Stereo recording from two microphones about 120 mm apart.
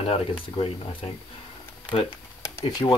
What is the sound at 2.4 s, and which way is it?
Speech, 35° left (ahead or behind).